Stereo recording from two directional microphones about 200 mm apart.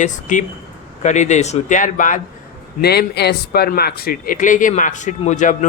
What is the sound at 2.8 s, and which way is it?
Speech, 55° left (ahead or behind).